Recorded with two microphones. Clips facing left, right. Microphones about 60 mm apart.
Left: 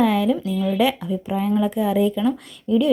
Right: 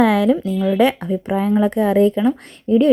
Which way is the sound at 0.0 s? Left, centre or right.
Right.